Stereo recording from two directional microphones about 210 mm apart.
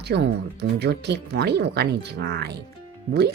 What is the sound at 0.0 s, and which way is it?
Speech, 50° right (ahead or behind).